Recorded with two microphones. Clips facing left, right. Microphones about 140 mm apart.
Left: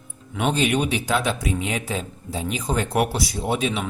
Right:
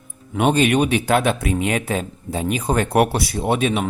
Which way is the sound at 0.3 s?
55° right (ahead or behind).